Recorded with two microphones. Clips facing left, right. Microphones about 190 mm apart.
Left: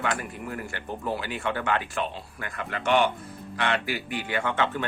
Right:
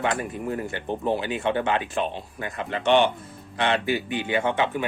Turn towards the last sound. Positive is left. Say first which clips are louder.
# right 3 dB
turn(degrees=-15)  # may be behind; listen again after turning